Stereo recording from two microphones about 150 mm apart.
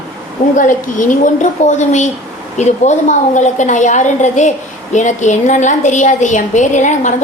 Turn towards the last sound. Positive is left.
turn(degrees=55)  # may be behind; listen again after turning